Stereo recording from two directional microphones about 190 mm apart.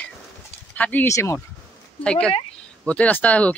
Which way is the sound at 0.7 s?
10° left (ahead or behind).